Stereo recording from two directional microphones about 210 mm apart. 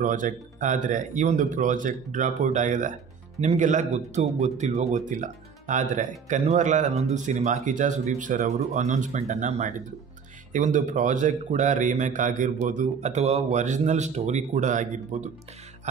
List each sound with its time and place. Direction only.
0.0 s speech: 40° right (ahead or behind)